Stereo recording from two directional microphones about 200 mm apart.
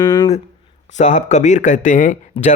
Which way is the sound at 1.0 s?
35° left (ahead or behind).